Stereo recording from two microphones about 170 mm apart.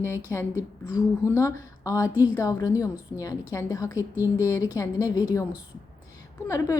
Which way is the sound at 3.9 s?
15° right (ahead or behind).